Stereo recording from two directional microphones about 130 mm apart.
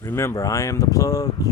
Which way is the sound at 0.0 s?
20° left (ahead or behind).